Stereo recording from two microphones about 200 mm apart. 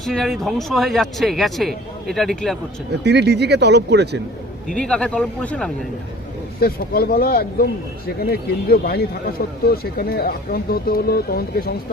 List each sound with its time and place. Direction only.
0.0 s speech: centre (ahead or behind)
3.0 s speech: 55° right (ahead or behind)
4.7 s speech: 5° left (ahead or behind)
6.6 s speech: 50° left (ahead or behind)